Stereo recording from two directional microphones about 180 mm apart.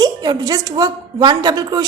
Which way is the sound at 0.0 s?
20° right (ahead or behind).